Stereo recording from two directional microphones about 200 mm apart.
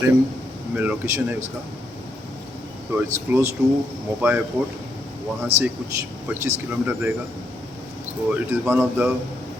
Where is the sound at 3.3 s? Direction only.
10° right (ahead or behind).